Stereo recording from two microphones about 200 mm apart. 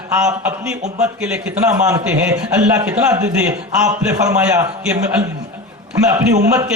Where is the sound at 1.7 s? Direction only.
15° right (ahead or behind).